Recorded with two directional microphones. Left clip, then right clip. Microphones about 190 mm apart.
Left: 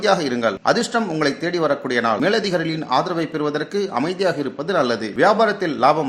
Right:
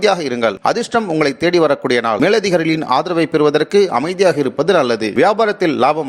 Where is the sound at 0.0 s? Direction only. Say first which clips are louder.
Right 3 dB; 40° right (ahead or behind).